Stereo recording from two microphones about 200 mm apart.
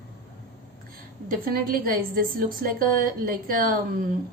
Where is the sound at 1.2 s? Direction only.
45° right (ahead or behind).